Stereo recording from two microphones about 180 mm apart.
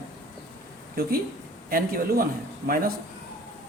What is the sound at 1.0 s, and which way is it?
Speech, 55° right (ahead or behind).